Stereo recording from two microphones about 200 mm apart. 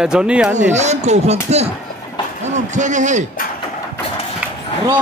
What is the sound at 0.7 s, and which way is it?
A man's voice, 35° right (ahead or behind).